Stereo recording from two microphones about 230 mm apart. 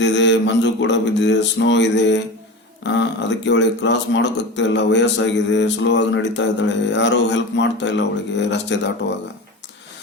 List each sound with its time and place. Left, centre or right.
0.0 s speech: left